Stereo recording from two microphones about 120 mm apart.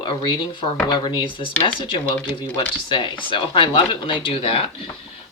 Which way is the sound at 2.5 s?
40° left (ahead or behind).